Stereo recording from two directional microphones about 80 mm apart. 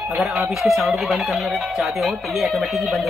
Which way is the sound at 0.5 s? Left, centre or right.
Centre.